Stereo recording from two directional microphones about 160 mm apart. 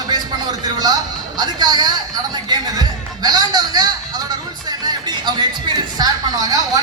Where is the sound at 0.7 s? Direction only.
25° right (ahead or behind).